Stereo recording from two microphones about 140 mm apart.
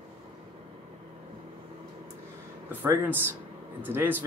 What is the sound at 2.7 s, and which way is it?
Speech, 15° right (ahead or behind).